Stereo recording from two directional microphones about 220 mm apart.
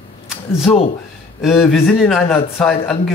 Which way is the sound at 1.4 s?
Centre (ahead or behind).